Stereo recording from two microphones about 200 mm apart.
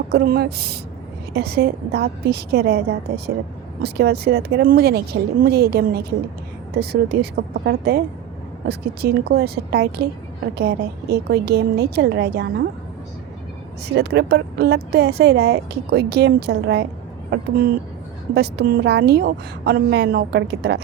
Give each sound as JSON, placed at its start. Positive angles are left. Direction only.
{"t": 0.1, "sound": "speech", "side_deg": -50}
{"t": 3.8, "sound": "speech", "side_deg": -55}
{"t": 13.8, "sound": "speech", "side_deg": -55}